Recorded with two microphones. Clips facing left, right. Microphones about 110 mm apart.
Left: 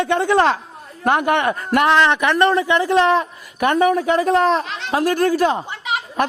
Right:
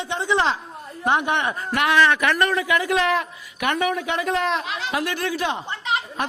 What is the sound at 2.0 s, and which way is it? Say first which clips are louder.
Speech: left 3 dB; 20° left (ahead or behind).